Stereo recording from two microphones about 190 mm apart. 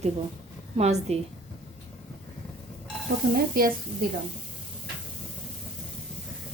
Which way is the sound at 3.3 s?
50° right (ahead or behind).